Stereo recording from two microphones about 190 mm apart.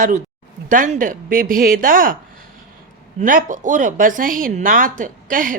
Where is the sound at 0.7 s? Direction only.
45° right (ahead or behind).